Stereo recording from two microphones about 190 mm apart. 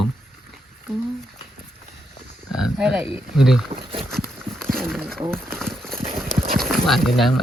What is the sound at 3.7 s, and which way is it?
Speech, 30° right (ahead or behind).